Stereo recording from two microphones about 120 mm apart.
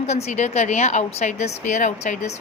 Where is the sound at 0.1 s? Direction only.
70° left (ahead or behind).